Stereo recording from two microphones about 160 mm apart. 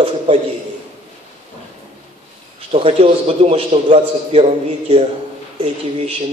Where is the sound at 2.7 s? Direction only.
35° right (ahead or behind).